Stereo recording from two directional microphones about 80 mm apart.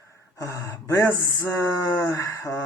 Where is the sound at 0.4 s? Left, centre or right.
Left.